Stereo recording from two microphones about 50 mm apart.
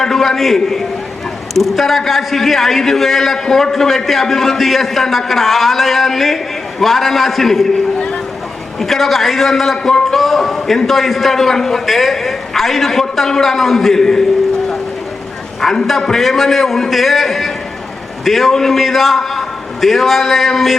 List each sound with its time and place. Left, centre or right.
0.0 s a man's voice: centre
7.9 s a sound: left
8.8 s a man's voice: centre
15.6 s a man's voice: centre